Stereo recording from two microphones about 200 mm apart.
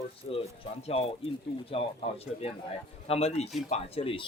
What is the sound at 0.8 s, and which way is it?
Speech, 30° left (ahead or behind).